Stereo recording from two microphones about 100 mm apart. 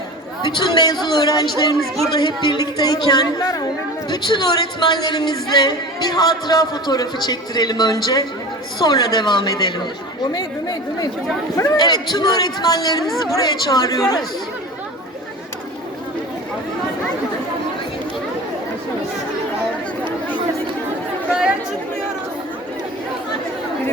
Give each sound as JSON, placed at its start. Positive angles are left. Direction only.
{"t": 0.4, "sound": "speech", "side_deg": 45}
{"t": 1.5, "sound": "speech", "side_deg": 0}
{"t": 2.0, "sound": "a woman's voice", "side_deg": 45}